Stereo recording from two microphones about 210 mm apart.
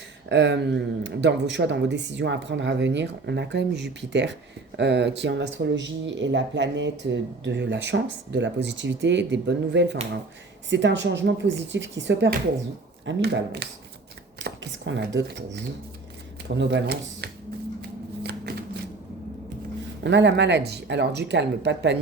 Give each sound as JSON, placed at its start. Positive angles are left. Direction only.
{"t": 0.3, "sound": "speech", "side_deg": -55}
{"t": 18.2, "sound": "shuffling cards", "side_deg": -50}
{"t": 20.1, "sound": "speech", "side_deg": -55}